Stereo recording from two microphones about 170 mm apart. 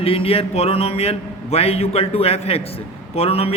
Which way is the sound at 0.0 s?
35° left (ahead or behind).